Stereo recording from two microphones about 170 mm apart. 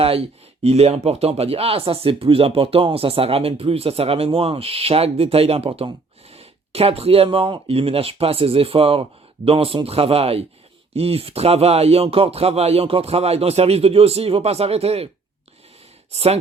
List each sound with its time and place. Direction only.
0.0 s speech: 35° right (ahead or behind)
16.1 s speech: 35° right (ahead or behind)